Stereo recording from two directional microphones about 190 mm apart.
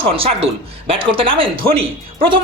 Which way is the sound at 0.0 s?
30° right (ahead or behind).